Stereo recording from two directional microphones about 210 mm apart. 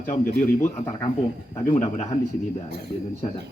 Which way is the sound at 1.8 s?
35° left (ahead or behind).